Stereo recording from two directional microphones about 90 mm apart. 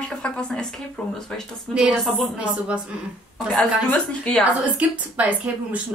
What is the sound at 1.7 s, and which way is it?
Speech, 10° right (ahead or behind).